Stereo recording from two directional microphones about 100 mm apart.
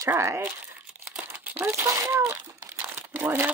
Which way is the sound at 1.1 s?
15° right (ahead or behind).